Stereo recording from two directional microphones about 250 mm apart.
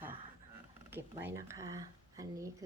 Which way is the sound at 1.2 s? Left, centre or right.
Centre.